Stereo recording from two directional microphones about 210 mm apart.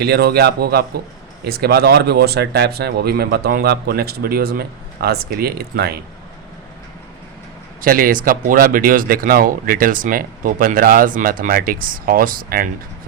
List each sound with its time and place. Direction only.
0.0 s speech: 50° right (ahead or behind)
7.8 s speech: 40° right (ahead or behind)